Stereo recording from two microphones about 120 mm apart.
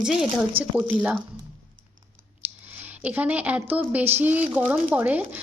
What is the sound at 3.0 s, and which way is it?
A woman's voice, 10° right (ahead or behind).